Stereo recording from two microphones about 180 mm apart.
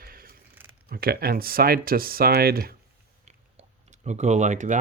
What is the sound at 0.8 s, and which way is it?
Speech, 55° right (ahead or behind).